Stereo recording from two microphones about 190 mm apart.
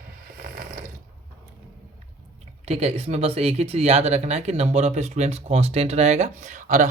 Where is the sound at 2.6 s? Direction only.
35° right (ahead or behind).